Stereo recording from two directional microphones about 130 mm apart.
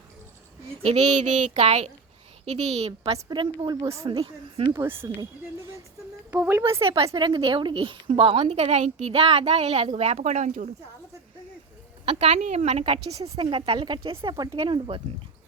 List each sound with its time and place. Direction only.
0.8 s speech: 55° right (ahead or behind)
3.2 s a woman's voice: 40° right (ahead or behind)
4.7 s speech: 20° right (ahead or behind)
6.3 s a woman's voice: 15° right (ahead or behind)
6.8 s a woman's voice: 45° right (ahead or behind); by 10.7 s 70° right (ahead or behind)
12.0 s a woman's voice: 50° right (ahead or behind)
14.5 s a woman's voice: 45° right (ahead or behind)